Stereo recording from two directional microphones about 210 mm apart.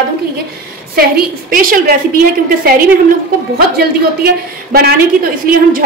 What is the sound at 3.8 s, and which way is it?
A woman's voice, 45° right (ahead or behind).